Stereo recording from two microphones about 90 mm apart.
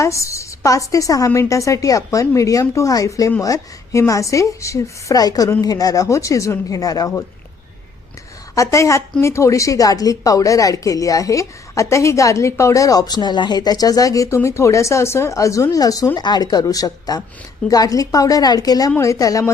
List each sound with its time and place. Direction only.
0.0 s speech: 35° left (ahead or behind)
8.5 s a woman's voice: 35° left (ahead or behind)
18.9 s speech: 35° left (ahead or behind)